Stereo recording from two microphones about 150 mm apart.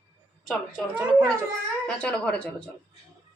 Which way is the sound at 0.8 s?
5° left (ahead or behind).